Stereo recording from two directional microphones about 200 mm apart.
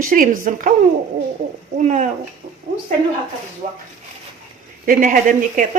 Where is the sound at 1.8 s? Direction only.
35° right (ahead or behind).